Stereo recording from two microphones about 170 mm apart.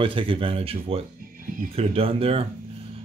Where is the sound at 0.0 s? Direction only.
30° right (ahead or behind).